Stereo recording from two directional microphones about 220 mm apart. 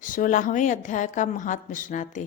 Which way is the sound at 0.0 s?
35° left (ahead or behind).